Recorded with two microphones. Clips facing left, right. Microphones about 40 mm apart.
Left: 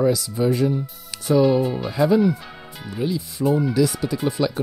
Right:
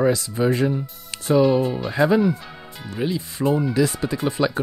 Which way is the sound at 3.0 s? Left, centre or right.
Right.